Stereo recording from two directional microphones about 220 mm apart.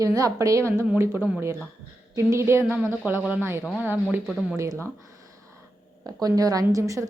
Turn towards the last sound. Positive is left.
turn(degrees=-15)  # may be behind; listen again after turning